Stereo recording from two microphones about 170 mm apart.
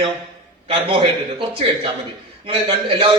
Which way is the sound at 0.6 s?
30° right (ahead or behind).